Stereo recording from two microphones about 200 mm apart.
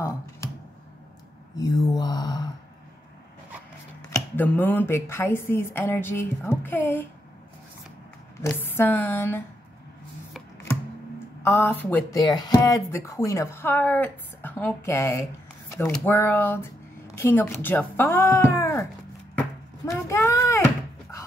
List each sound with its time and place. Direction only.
1.6 s mantra: 20° left (ahead or behind)
4.4 s speech: 10° left (ahead or behind)
8.4 s speech: 10° left (ahead or behind)
11.4 s speech: 10° left (ahead or behind)
19.3 s a sound: 15° left (ahead or behind)